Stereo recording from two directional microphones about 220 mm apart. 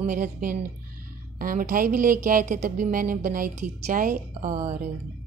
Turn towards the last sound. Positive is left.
turn(degrees=-35)  # may be behind; listen again after turning